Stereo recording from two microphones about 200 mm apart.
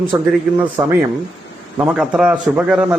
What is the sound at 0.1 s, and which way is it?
Speech, 10° right (ahead or behind).